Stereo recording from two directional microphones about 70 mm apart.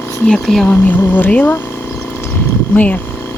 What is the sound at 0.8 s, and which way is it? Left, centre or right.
Speech, left.